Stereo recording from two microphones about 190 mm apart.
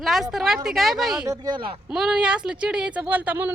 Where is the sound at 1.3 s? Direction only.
20° right (ahead or behind).